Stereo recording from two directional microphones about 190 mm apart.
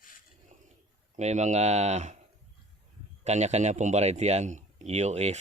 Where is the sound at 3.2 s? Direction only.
35° right (ahead or behind).